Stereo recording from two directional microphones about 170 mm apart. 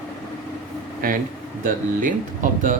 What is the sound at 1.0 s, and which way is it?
Speech, 60° right (ahead or behind).